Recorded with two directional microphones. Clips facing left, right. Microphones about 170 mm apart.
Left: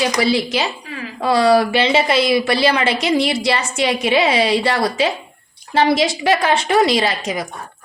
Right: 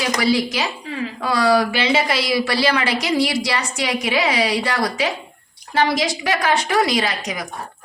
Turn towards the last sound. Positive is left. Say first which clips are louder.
# left 4 dB
turn(degrees=25)  # may be behind; listen again after turning